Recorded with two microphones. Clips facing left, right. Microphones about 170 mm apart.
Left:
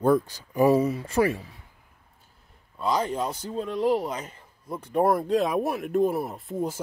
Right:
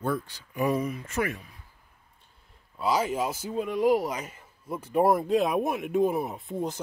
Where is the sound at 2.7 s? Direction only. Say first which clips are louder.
Even; 5° right (ahead or behind).